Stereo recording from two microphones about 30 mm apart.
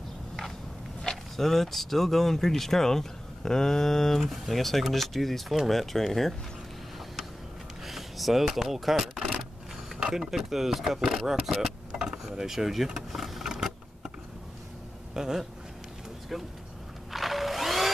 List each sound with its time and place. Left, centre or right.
1.3 s speech: centre
7.8 s a sound: centre
8.5 s speech: centre
9.1 s keys jangling: centre
10.0 s speech: centre
11.9 s a sound: right
12.4 s speech: centre
12.9 s vehicle: centre
13.5 s a sound: right
15.1 s speech: centre
17.1 s music: centre